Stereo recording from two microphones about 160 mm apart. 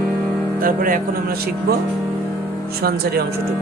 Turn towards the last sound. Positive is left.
turn(degrees=-75)  # may be behind; listen again after turning